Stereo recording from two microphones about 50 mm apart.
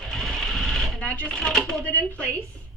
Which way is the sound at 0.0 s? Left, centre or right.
Centre.